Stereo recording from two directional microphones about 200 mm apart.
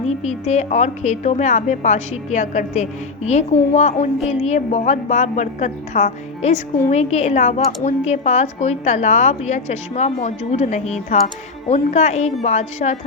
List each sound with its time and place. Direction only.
0.0 s a woman's voice: 35° left (ahead or behind)